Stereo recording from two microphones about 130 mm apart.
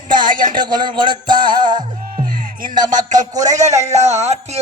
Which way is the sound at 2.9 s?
80° right.